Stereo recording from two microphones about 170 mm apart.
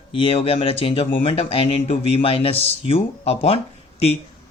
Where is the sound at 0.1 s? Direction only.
35° left (ahead or behind).